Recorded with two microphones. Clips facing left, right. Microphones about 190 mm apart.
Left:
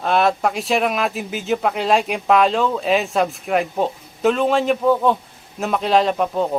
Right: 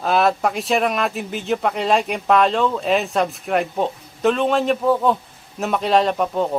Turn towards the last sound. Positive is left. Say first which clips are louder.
# left 1 dB
turn(degrees=0)  # may be behind; listen again after turning